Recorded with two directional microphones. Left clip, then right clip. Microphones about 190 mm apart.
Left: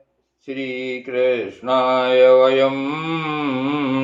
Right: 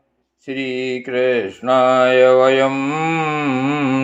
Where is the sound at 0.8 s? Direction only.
35° right (ahead or behind).